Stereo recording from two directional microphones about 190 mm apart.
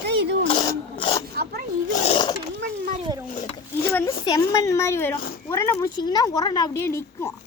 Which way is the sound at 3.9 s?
10° left (ahead or behind).